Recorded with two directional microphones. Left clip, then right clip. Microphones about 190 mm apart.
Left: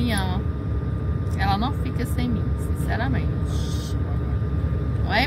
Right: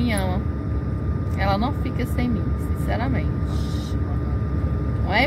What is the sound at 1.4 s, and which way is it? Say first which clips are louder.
Speech: right 1 dB; 15° left (ahead or behind).